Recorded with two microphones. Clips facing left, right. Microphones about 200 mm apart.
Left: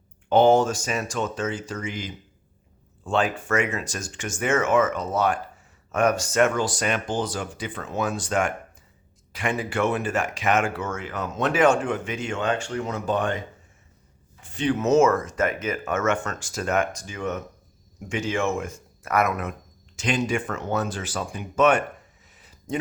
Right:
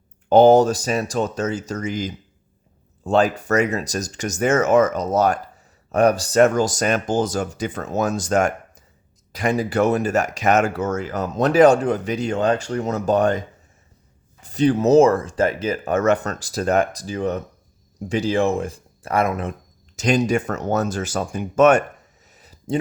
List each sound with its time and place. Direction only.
0.3 s speech: 40° right (ahead or behind)
14.4 s speech: 40° right (ahead or behind)
20.0 s speech: 40° right (ahead or behind)
22.3 s a sound: 40° right (ahead or behind)